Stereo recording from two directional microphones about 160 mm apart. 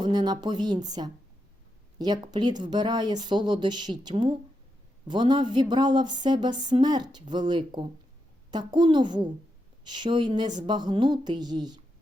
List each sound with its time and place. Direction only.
0.0 s speech: 25° right (ahead or behind)